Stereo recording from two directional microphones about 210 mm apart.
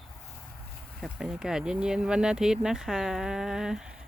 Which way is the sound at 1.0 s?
5° right (ahead or behind).